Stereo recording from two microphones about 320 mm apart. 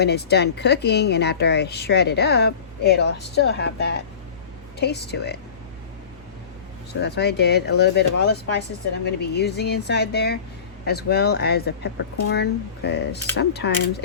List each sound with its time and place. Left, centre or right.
0.0 s speech: left
7.0 s speech: left